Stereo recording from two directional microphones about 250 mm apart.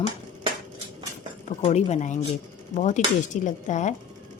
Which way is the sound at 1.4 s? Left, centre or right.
Left.